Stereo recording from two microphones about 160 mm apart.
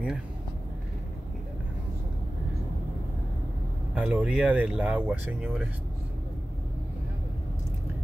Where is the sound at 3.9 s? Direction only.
10° right (ahead or behind).